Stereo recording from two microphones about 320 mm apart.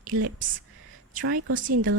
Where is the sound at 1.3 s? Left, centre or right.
Right.